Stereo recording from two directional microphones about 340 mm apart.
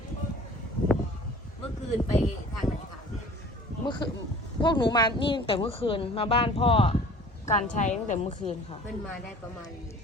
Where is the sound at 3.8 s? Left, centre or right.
Centre.